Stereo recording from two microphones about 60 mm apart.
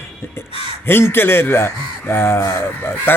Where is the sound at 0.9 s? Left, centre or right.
Left.